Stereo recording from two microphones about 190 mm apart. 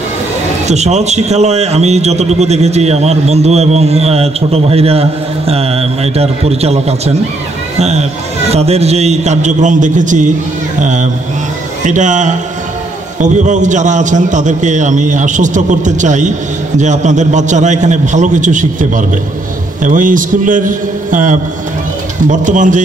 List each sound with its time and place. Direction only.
0.7 s a man's voice: 35° right (ahead or behind)